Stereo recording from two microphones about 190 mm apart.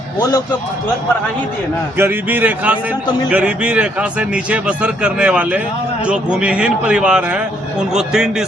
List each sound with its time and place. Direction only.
0.2 s speech: 20° left (ahead or behind)
2.0 s a man's voice: 10° right (ahead or behind)